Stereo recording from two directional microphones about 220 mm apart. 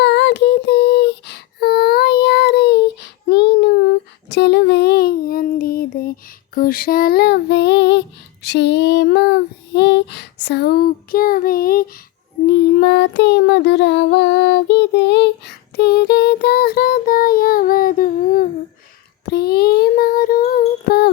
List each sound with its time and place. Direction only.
0.0 s child singing: 50° left (ahead or behind)
8.4 s a sound: 50° left (ahead or behind)
12.5 s child singing: 50° left (ahead or behind)